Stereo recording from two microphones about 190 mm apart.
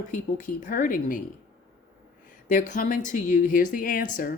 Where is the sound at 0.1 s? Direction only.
45° left (ahead or behind).